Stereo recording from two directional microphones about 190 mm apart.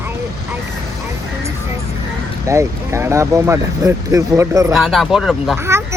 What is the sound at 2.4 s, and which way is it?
Speech, 15° right (ahead or behind).